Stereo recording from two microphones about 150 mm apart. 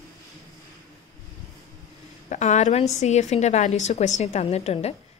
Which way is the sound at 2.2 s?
50° left (ahead or behind).